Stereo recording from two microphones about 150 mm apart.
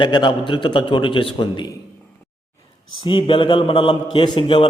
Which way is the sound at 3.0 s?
35° left (ahead or behind).